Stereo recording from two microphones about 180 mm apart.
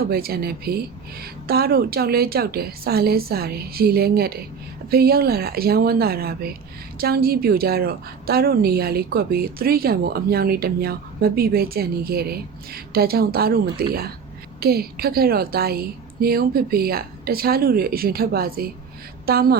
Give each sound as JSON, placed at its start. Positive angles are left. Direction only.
{"t": 0.1, "sound": "a woman's voice", "side_deg": -60}